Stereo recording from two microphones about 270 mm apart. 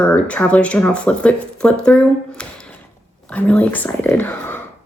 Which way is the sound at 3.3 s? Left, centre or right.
Centre.